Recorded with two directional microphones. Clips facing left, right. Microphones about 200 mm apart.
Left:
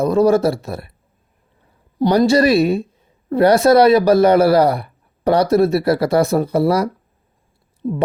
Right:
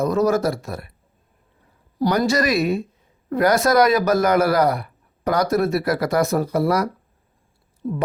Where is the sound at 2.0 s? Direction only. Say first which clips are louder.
Left 6 dB; 30° left (ahead or behind).